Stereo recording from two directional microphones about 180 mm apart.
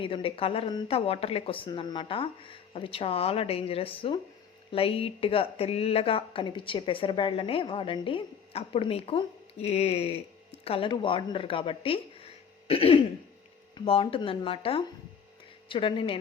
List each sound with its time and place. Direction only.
0.0 s speech: 30° left (ahead or behind)
12.6 s throat clearing: 30° left (ahead or behind)
13.7 s speech: 30° left (ahead or behind)